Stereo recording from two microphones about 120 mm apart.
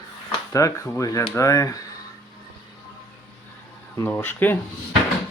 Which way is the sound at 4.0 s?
15° left (ahead or behind).